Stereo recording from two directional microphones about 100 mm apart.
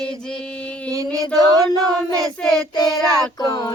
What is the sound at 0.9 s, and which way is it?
Child singing, 35° right (ahead or behind).